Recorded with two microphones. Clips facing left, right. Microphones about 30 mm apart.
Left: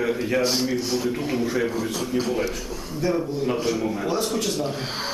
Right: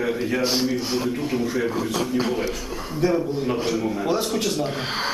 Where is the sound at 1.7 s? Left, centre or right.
Centre.